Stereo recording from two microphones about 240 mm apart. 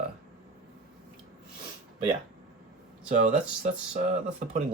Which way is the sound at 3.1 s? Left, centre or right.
Right.